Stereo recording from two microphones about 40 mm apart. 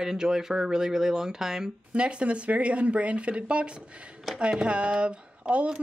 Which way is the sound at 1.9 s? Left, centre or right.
Right.